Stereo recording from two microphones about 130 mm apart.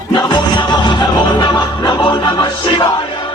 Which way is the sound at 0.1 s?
35° left (ahead or behind).